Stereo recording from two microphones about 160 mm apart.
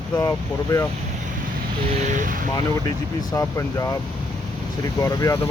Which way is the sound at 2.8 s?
20° left (ahead or behind).